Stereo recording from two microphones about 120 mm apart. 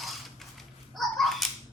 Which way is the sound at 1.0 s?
Centre (ahead or behind).